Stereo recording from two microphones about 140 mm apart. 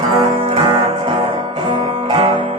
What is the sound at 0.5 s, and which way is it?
Music, 35° right (ahead or behind).